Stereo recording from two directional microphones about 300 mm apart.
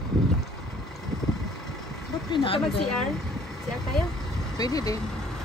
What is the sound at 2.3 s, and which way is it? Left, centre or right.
Speech, centre.